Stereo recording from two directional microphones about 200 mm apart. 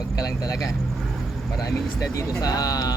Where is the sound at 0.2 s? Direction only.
15° left (ahead or behind).